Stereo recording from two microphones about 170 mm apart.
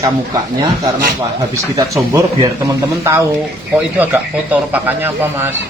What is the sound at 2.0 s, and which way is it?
Speech, 15° right (ahead or behind).